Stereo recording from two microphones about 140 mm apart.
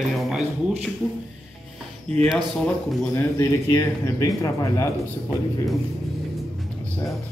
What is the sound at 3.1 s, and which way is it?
Speech, 20° left (ahead or behind).